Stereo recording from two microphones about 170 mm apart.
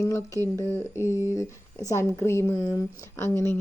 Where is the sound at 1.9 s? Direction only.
15° left (ahead or behind).